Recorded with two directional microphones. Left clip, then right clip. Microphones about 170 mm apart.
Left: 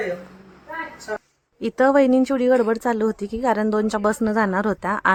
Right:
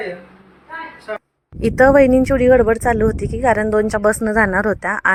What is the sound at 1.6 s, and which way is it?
A woman's voice, 25° right (ahead or behind).